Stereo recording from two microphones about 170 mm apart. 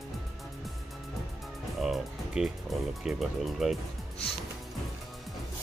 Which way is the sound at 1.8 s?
Centre (ahead or behind).